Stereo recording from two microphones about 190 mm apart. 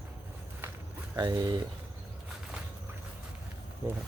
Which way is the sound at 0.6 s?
10° right (ahead or behind).